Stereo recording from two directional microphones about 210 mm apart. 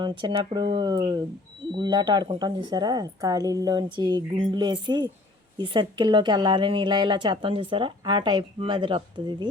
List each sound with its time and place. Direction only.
0.0 s a woman's voice: 25° right (ahead or behind)